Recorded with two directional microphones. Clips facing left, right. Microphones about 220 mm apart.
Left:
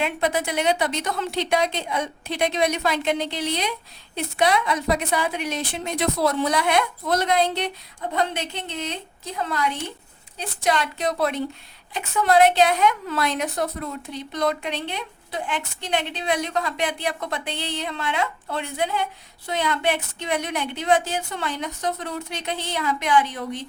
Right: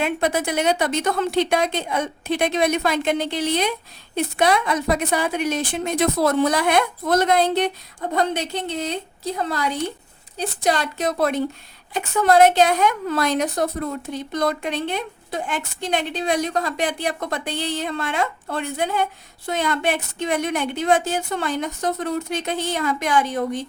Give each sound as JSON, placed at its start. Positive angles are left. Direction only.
{"t": 0.0, "sound": "a woman's voice", "side_deg": -50}